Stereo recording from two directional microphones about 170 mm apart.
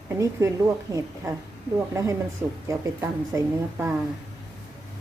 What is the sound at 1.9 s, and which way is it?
Speech, 15° right (ahead or behind).